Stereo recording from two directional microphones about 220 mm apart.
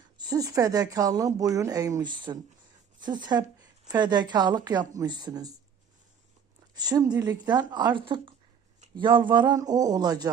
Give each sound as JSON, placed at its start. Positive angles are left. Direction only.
{"t": 0.2, "sound": "speech", "side_deg": -15}
{"t": 6.7, "sound": "speech", "side_deg": -15}